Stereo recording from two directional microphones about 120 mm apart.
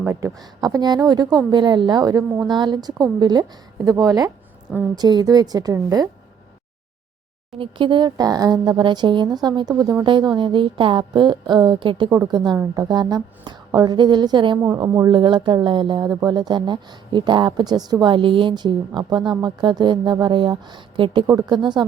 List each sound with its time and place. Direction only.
0.0 s speech: 20° right (ahead or behind)
0.6 s speech: 35° right (ahead or behind)
7.6 s speech: 45° right (ahead or behind)
21.2 s speech: 35° right (ahead or behind)